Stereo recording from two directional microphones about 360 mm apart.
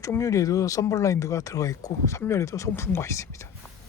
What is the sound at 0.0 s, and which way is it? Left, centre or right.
Speech, centre.